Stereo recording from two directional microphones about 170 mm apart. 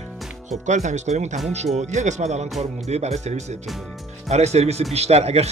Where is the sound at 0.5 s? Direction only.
45° right (ahead or behind).